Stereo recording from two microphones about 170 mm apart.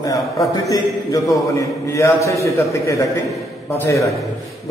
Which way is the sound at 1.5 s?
15° left (ahead or behind).